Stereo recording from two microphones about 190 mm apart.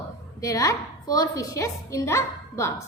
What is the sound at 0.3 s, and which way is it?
A woman's voice, 20° left (ahead or behind).